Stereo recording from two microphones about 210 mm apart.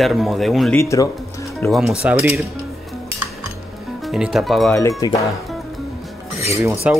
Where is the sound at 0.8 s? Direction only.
15° left (ahead or behind).